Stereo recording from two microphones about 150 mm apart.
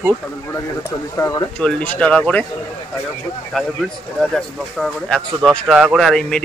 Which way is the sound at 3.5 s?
5° left (ahead or behind).